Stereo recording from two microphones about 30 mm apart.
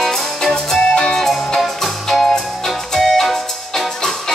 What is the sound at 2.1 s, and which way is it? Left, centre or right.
Music, left.